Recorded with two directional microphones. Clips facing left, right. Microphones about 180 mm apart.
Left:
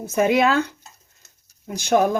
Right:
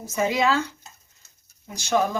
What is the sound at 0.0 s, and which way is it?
Speech, 60° left (ahead or behind).